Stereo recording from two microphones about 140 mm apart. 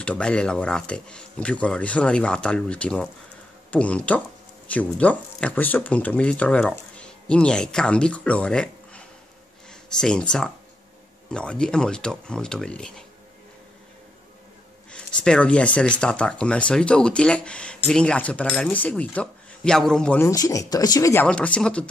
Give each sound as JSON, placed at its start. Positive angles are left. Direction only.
{"t": 0.0, "sound": "speech", "side_deg": 10}
{"t": 14.9, "sound": "speech", "side_deg": 5}
{"t": 20.2, "sound": "speech", "side_deg": 20}